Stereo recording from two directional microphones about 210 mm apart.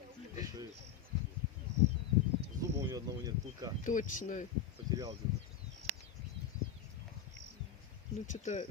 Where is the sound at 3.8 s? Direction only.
40° left (ahead or behind).